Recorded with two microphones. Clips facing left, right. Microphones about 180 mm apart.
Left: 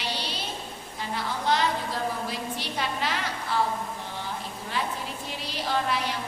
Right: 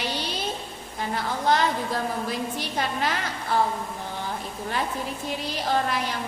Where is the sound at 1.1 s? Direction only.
50° right (ahead or behind).